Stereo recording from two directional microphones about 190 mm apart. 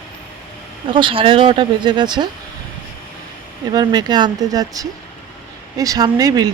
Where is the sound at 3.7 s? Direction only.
20° right (ahead or behind).